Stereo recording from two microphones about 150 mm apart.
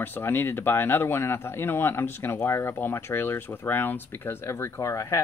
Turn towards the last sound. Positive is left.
turn(degrees=15)  # may be behind; listen again after turning